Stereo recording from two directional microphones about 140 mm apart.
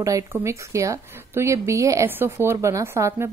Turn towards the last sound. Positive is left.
turn(degrees=-20)  # may be behind; listen again after turning